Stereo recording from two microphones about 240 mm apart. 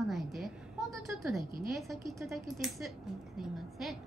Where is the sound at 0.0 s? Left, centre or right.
Centre.